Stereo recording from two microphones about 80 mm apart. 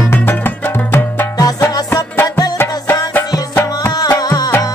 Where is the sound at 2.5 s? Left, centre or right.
Left.